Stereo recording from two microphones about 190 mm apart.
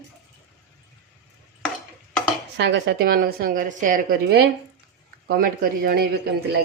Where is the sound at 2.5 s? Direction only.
65° right (ahead or behind).